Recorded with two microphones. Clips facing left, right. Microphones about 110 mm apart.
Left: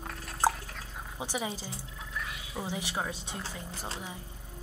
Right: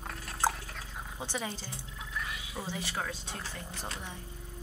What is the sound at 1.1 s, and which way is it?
Speech, 10° left (ahead or behind).